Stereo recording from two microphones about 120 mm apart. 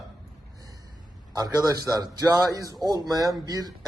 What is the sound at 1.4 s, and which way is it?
A man's voice, 30° right (ahead or behind).